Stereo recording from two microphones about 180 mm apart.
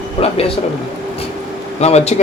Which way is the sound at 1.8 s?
35° left (ahead or behind).